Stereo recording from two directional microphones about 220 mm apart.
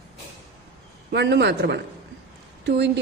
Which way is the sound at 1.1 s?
50° right (ahead or behind).